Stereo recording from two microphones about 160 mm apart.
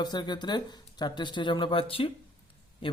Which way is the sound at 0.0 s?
25° left (ahead or behind).